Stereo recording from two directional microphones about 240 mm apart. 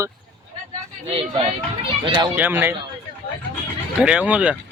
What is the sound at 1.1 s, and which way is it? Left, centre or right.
Speech, right.